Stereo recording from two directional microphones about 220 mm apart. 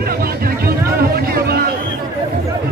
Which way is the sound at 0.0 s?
45° right (ahead or behind).